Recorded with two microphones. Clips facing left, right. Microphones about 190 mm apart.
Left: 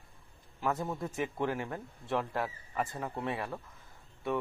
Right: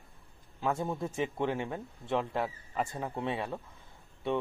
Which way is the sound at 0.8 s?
10° right (ahead or behind).